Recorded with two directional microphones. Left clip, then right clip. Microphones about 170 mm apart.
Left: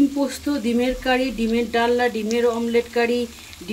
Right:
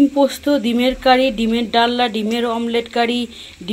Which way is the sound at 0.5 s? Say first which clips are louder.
Right 5 dB; 25° right (ahead or behind).